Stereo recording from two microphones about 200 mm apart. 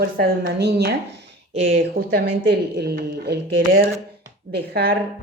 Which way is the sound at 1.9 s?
55° right (ahead or behind).